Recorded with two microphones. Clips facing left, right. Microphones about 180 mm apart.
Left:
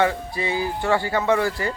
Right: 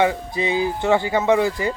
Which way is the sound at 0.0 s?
20° right (ahead or behind).